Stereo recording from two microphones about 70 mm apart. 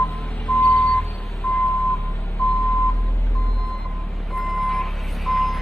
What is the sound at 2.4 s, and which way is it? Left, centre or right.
Vehicle, left.